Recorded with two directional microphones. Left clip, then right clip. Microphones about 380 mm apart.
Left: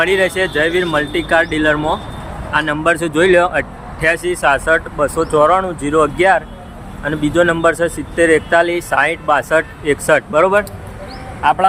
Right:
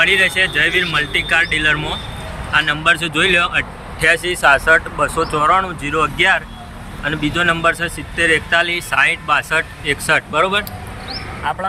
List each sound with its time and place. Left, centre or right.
0.0 s speech: centre
11.4 s speech: left